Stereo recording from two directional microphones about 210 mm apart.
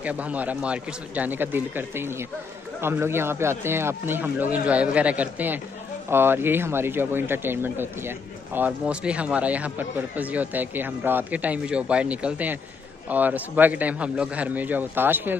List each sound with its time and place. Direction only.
0.0 s speech: 5° right (ahead or behind)